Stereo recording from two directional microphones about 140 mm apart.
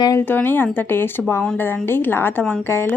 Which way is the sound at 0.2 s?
15° left (ahead or behind).